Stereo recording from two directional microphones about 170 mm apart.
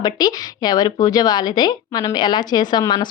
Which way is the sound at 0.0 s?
25° left (ahead or behind).